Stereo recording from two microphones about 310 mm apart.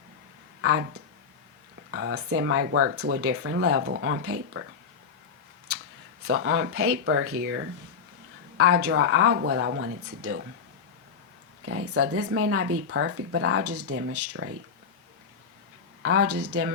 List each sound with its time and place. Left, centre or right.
0.6 s speech: right
6.2 s speech: right
8.8 s speech: right
11.6 s speech: right
16.0 s speech: right